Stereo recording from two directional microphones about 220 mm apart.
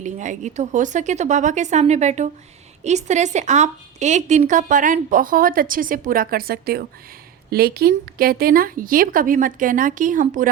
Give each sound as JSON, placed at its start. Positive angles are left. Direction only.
{"t": 0.0, "sound": "a woman's voice", "side_deg": -35}